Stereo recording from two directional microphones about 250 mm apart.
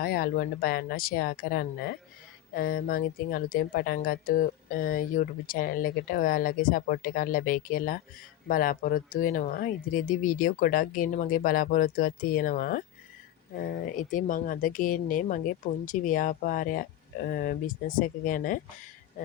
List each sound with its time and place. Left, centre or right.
0.0 s speech: left